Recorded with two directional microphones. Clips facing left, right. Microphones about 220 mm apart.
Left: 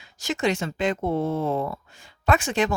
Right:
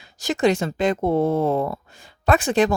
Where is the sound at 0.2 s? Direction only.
35° right (ahead or behind).